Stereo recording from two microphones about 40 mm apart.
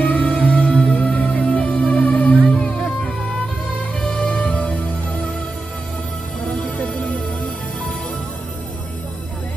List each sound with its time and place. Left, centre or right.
0.1 s music: left
2.4 s music: left
6.4 s music: left